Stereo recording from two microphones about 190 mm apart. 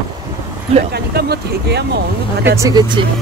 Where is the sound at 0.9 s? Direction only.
55° right (ahead or behind).